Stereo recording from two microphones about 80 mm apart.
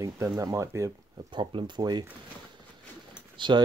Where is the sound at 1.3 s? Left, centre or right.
Right.